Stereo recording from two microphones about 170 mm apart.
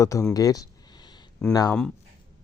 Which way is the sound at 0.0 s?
20° left (ahead or behind).